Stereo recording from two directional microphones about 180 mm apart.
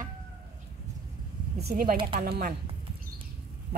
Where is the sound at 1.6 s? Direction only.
55° right (ahead or behind).